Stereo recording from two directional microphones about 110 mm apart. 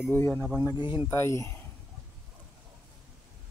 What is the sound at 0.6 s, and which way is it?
Speech, 40° left (ahead or behind).